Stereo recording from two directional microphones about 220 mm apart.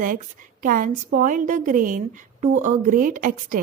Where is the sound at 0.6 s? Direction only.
40° right (ahead or behind).